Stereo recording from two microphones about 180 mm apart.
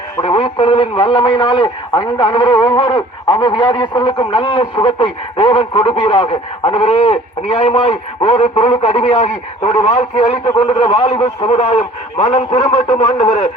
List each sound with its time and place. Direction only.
0.2 s a man's voice: 30° left (ahead or behind)